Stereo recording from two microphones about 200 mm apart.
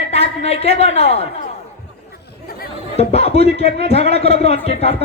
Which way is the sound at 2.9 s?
30° left (ahead or behind).